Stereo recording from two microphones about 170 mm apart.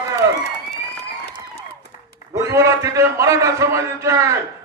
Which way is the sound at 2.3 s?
20° right (ahead or behind).